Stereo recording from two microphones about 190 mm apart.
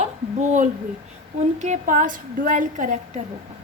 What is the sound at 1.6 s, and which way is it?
A woman's voice, 40° right (ahead or behind).